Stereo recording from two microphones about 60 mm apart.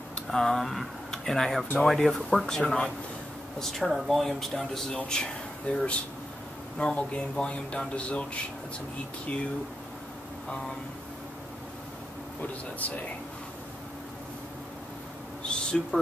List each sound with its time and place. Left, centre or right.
0.3 s speech: centre
4.9 s speech: centre
12.4 s speech: left
15.4 s a sound: centre